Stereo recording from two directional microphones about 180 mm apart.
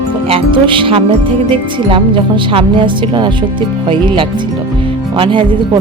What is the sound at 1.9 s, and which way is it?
Speech, 30° right (ahead or behind).